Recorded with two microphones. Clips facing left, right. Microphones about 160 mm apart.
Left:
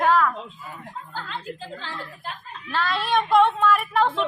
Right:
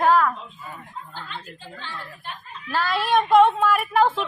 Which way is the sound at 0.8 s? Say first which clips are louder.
Left 2 dB; 85° left.